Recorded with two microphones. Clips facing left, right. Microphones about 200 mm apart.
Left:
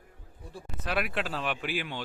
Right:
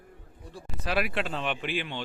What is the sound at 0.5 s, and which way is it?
Speech, centre (ahead or behind).